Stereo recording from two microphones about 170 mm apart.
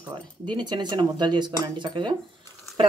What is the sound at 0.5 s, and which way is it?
Speech, 25° right (ahead or behind).